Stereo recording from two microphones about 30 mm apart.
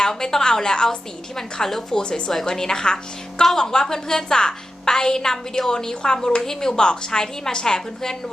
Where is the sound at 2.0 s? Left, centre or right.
Left.